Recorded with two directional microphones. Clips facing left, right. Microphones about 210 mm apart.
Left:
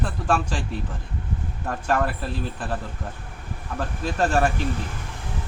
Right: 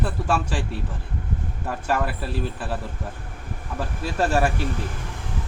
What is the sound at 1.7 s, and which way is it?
Speech, 5° right (ahead or behind).